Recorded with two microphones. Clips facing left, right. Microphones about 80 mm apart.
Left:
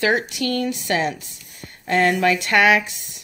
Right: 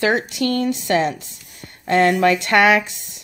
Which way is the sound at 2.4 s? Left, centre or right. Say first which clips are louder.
Right 1 dB; centre.